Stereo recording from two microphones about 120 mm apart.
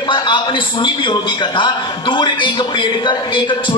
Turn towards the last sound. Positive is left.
turn(degrees=45)  # may be behind; listen again after turning